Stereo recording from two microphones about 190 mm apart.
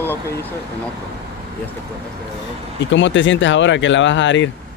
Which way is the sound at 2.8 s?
75° left (ahead or behind).